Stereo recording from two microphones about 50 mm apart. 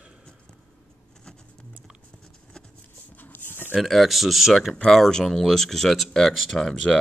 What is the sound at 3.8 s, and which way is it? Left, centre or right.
Speech, centre.